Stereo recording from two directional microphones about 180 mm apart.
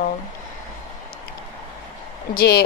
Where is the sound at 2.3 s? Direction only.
60° left (ahead or behind).